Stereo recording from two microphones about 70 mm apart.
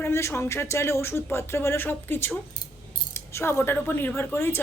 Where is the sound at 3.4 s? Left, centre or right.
Left.